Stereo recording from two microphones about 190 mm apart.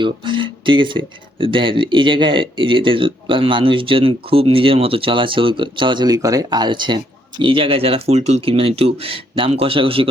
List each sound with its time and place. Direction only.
0.0 s speech: 25° right (ahead or behind)